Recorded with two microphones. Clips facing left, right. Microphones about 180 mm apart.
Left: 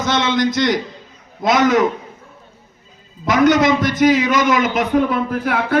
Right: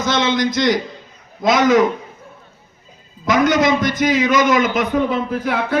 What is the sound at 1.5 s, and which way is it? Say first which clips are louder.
Speech: even; 60° left (ahead or behind).